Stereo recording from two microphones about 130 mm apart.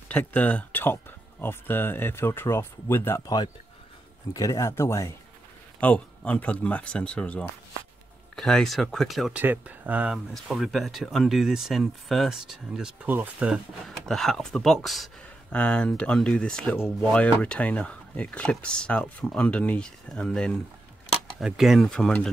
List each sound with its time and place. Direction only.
0.1 s speech: 15° left (ahead or behind)
4.3 s speech: 25° left (ahead or behind)
5.8 s speech: 10° left (ahead or behind)
9.4 s speech: 15° right (ahead or behind)
13.5 s speech: centre (ahead or behind)